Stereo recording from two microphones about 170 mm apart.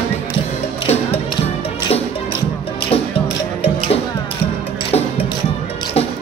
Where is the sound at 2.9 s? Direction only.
35° left (ahead or behind).